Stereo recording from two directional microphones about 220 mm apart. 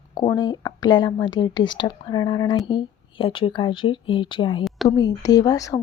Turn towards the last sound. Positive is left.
turn(degrees=15)  # may be behind; listen again after turning